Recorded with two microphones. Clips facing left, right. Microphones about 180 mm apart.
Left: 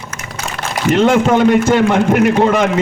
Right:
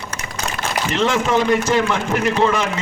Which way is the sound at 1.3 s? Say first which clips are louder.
Left 6 dB; 65° left (ahead or behind).